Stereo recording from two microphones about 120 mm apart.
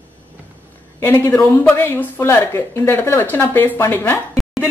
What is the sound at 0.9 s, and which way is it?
Speech, 15° left (ahead or behind).